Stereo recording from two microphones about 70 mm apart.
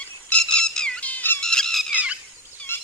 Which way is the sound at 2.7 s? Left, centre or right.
Left.